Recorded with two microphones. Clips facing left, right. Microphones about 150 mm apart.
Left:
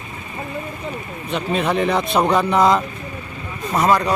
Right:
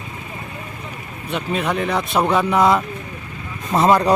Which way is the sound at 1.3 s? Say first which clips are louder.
Left 2 dB; 5° right (ahead or behind).